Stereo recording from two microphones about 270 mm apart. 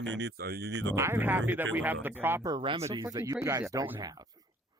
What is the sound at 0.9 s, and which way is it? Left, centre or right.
Speech, centre.